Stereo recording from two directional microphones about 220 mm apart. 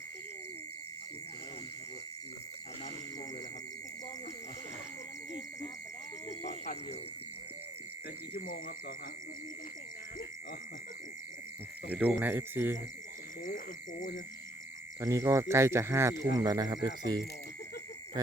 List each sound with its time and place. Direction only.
6.2 s a sound: 30° left (ahead or behind)
8.3 s speech: 40° left (ahead or behind)
11.9 s speech: 5° right (ahead or behind)
15.0 s speech: 15° right (ahead or behind)